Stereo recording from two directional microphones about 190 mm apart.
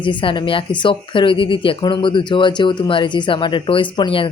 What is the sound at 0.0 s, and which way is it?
Speech, 25° left (ahead or behind).